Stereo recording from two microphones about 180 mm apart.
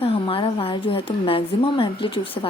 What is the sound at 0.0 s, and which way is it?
A woman's voice, 30° left (ahead or behind).